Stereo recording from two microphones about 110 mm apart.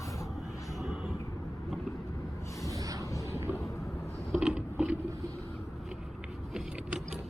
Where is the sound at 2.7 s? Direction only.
30° right (ahead or behind).